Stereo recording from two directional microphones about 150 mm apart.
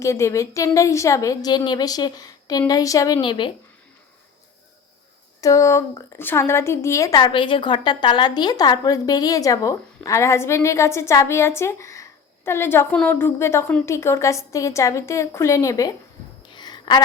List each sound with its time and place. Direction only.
0.0 s a woman's voice: 20° left (ahead or behind)
5.4 s a woman's voice: 20° left (ahead or behind)
16.5 s a sound: 30° left (ahead or behind)